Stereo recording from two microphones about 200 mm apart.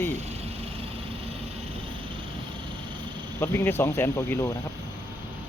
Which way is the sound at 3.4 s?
10° left (ahead or behind).